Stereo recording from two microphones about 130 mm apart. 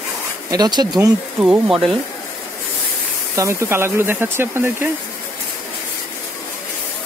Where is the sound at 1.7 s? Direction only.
Centre (ahead or behind).